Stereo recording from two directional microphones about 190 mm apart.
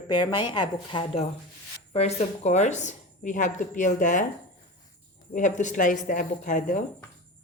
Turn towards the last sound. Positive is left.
turn(degrees=40)  # may be behind; listen again after turning